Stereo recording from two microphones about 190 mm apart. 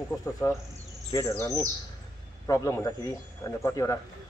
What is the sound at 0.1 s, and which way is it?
Speech, 15° left (ahead or behind).